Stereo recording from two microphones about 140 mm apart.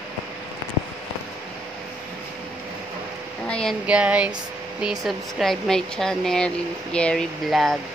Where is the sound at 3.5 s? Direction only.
5° left (ahead or behind).